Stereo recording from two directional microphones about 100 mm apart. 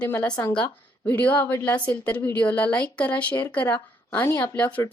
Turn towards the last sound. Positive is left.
turn(degrees=15)  # may be behind; listen again after turning